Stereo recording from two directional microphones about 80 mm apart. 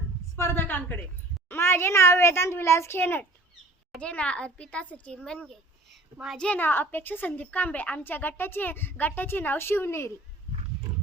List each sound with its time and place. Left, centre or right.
0.3 s a woman's voice: left
4.0 s a child's voice: centre
6.6 s a woman's voice: left